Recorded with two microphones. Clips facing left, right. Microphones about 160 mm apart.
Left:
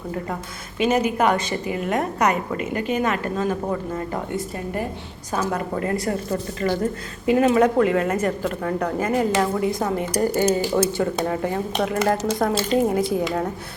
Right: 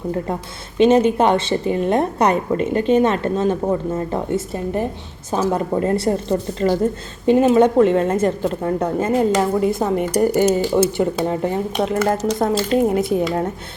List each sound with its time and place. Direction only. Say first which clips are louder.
0.8 s a woman's voice: right 6 dB; 30° right (ahead or behind)
5.5 s a woman's voice: right 7 dB; 25° right (ahead or behind)